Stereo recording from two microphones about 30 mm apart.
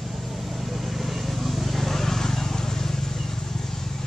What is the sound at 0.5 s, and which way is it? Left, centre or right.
Vehicle, centre.